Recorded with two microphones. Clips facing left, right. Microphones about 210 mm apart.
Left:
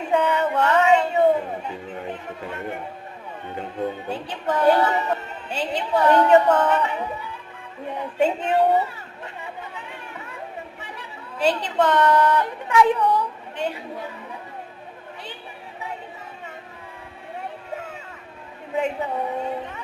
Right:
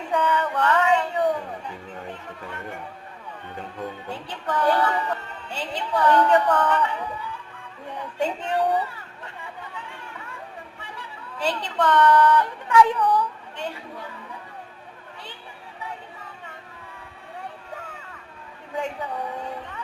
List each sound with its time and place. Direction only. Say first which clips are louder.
0.1 s music: left 3 dB; 25° left (ahead or behind)
2.4 s speech: left 5 dB; 20° left (ahead or behind)
7.9 s a sound: left 5 dB; 25° left (ahead or behind)
10.8 s a woman's voice: left 2 dB; 25° left (ahead or behind)
17.7 s a sound: left 5 dB; 25° left (ahead or behind)
18.7 s speech: left 5 dB; 25° left (ahead or behind)